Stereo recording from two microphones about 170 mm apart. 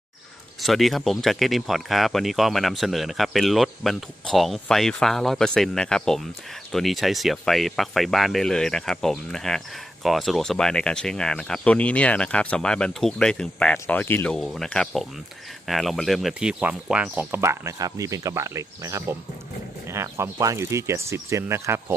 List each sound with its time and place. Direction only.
0.6 s speech: centre (ahead or behind); by 21.9 s 15° right (ahead or behind)